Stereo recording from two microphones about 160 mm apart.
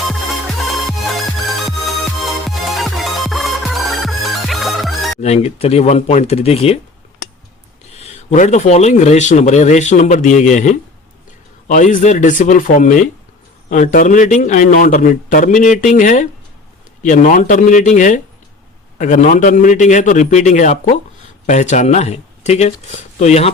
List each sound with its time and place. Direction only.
2.6 s music: centre (ahead or behind)
5.2 s speech: 40° left (ahead or behind)
7.9 s a man's voice: 40° left (ahead or behind)